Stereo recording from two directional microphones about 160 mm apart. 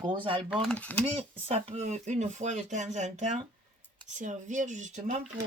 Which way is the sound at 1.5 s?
40° right (ahead or behind).